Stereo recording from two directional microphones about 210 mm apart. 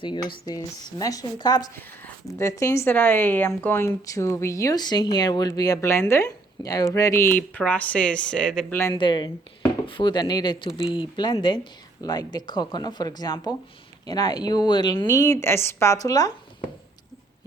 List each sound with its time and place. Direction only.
0.0 s speech: 20° left (ahead or behind)
9.0 s speech: 20° left (ahead or behind)